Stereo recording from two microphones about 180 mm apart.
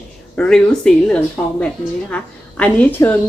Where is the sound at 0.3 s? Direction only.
5° left (ahead or behind).